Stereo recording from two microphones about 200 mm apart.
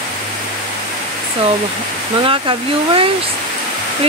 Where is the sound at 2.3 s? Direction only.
25° right (ahead or behind).